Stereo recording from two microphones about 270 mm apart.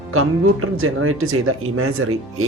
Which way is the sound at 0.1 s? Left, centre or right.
Right.